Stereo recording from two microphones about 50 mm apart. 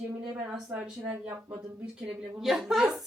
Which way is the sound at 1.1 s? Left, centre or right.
Right.